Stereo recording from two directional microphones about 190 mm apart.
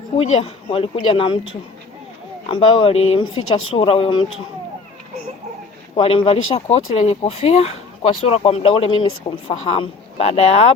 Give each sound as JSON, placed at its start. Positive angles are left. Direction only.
{"t": 0.2, "sound": "speech", "side_deg": 30}
{"t": 2.5, "sound": "speech", "side_deg": 25}
{"t": 6.0, "sound": "speech", "side_deg": 30}